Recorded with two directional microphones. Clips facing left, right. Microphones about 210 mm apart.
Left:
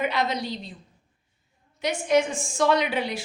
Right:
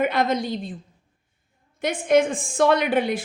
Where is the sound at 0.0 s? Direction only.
50° right (ahead or behind).